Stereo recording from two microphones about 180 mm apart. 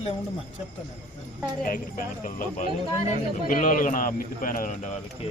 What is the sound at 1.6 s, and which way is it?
A man's voice, 50° left (ahead or behind).